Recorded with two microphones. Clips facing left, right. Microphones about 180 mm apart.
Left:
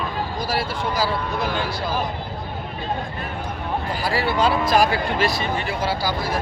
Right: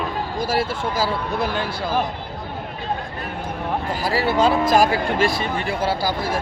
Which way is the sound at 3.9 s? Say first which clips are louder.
Right 2 dB; 40° right (ahead or behind).